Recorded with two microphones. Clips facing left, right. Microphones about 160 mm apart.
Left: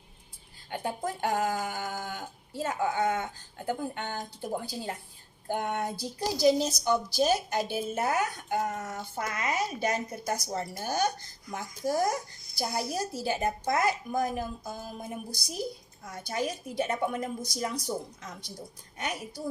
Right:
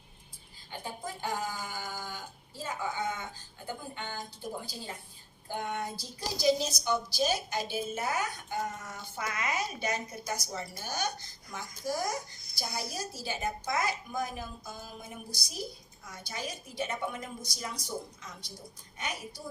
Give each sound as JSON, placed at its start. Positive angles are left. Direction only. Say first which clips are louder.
{"t": 0.7, "sound": "a woman's voice", "louder": "left 7 dB", "side_deg": 60}